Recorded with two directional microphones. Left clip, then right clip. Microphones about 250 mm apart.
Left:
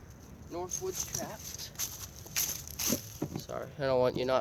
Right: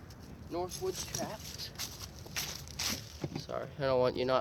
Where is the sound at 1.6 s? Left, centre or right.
Centre.